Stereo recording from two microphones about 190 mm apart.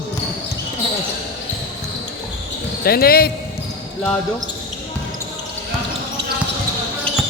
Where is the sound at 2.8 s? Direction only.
55° left (ahead or behind).